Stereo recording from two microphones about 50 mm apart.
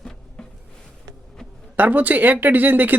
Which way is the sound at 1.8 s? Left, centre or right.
Right.